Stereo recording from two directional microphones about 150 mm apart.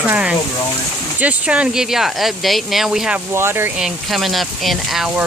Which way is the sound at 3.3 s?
15° right (ahead or behind).